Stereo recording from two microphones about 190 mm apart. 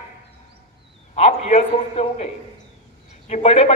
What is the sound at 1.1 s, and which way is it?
A man's voice, 35° left (ahead or behind).